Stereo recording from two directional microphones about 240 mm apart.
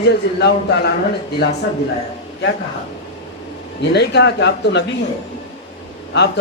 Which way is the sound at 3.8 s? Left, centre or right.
Left.